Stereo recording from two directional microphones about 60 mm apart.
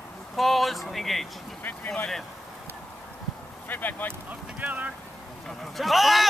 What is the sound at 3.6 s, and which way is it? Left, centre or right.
Speech, left.